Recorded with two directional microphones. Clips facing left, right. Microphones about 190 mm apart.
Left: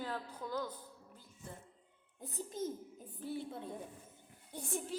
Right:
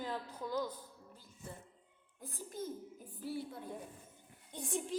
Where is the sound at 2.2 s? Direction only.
25° left (ahead or behind).